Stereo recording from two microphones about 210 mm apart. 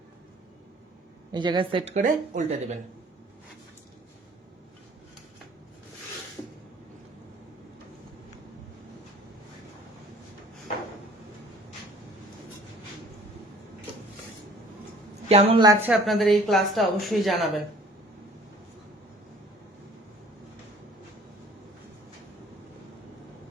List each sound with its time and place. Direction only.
1.3 s speech: 20° right (ahead or behind)
15.3 s a woman's voice: 30° right (ahead or behind)
15.9 s a woman's voice: centre (ahead or behind)